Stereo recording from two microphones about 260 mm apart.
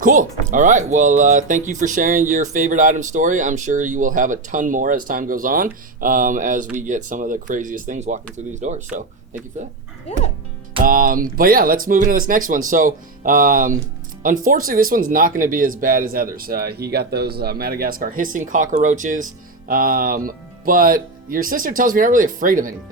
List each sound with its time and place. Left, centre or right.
0.0 s speech: right
10.8 s speech: right